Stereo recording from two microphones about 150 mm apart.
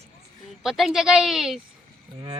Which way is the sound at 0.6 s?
Centre (ahead or behind).